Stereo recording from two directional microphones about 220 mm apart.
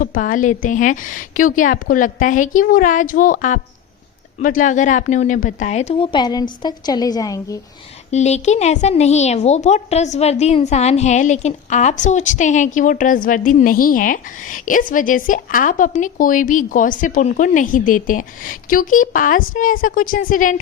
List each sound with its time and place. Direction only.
0.0 s a woman's voice: 40° left (ahead or behind); by 7.6 s 15° left (ahead or behind)
8.1 s a woman's voice: 30° left (ahead or behind)